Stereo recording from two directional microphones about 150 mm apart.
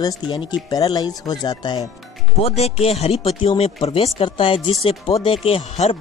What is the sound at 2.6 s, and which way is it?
Speech, 45° left (ahead or behind).